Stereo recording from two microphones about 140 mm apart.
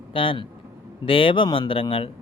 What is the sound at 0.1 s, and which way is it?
Speech, 40° left (ahead or behind).